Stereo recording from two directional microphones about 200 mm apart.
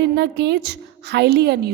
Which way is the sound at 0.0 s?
60° right (ahead or behind).